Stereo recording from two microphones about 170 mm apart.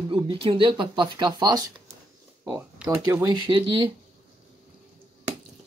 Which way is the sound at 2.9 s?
20° right (ahead or behind).